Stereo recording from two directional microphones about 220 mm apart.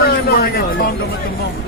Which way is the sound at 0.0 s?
45° left (ahead or behind).